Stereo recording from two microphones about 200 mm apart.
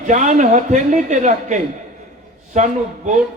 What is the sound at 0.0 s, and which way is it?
A man's voice, 40° right (ahead or behind).